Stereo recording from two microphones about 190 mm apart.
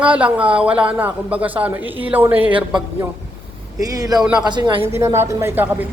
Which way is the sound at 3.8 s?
20° right (ahead or behind).